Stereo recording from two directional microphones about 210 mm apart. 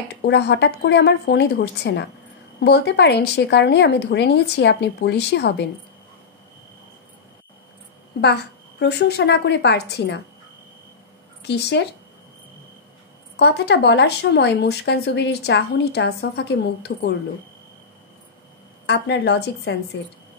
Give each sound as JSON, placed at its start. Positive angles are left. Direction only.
{"t": 0.2, "sound": "speech", "side_deg": 50}
{"t": 8.2, "sound": "speech", "side_deg": 50}
{"t": 11.4, "sound": "speech", "side_deg": 55}
{"t": 13.4, "sound": "speech", "side_deg": 55}
{"t": 18.9, "sound": "a woman's voice", "side_deg": 55}